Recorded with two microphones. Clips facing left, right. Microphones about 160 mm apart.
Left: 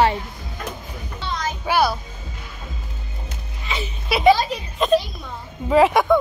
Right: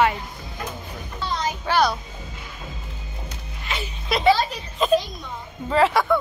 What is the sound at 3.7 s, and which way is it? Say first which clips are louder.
A child's voice: left 2 dB; 5° left (ahead or behind).